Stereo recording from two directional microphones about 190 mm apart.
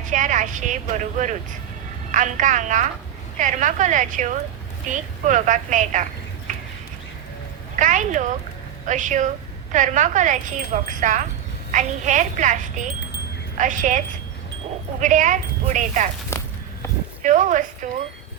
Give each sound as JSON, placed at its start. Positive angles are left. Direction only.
{"t": 0.1, "sound": "a woman's voice", "side_deg": -40}
{"t": 7.8, "sound": "a woman's voice", "side_deg": -40}
{"t": 15.0, "sound": "a woman's voice", "side_deg": -40}
{"t": 17.2, "sound": "a woman's voice", "side_deg": -40}